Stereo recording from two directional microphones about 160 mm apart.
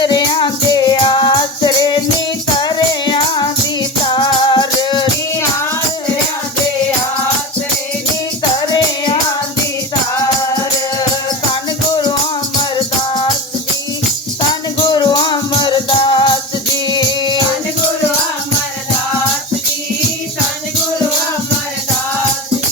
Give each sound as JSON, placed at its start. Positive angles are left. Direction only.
{"t": 0.0, "sound": "music", "side_deg": 25}
{"t": 14.8, "sound": "music", "side_deg": 30}